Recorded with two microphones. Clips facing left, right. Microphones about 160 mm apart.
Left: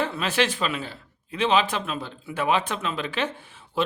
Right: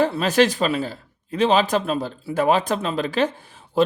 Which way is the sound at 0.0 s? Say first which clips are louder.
Right 7 dB; 40° right (ahead or behind).